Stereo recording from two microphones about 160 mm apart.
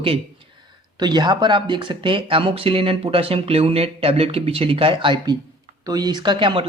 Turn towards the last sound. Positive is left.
turn(degrees=-30)  # may be behind; listen again after turning